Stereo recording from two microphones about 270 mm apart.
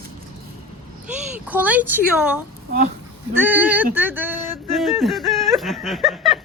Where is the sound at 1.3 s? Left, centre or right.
Centre.